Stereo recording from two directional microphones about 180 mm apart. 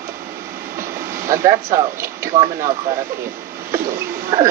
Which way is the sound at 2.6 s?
35° right (ahead or behind).